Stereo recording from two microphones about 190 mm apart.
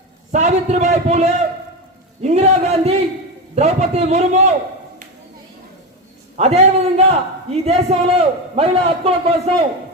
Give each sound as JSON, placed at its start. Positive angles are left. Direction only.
{"t": 0.3, "sound": "a man's voice", "side_deg": -35}
{"t": 6.3, "sound": "a man's voice", "side_deg": -35}